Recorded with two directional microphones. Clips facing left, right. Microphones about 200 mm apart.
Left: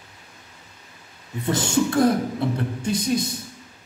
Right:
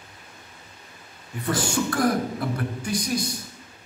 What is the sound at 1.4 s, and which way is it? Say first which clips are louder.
Speech: left 4 dB; 25° left (ahead or behind).